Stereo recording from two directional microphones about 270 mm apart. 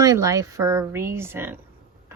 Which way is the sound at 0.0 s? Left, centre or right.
Centre.